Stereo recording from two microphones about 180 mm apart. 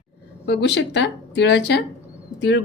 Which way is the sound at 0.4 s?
75° left (ahead or behind).